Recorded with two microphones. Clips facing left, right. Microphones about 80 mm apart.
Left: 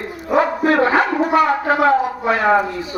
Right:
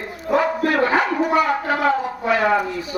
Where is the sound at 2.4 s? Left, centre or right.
Left.